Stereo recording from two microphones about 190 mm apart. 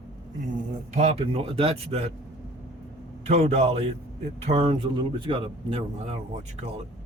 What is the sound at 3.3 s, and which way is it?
Speech, 35° right (ahead or behind).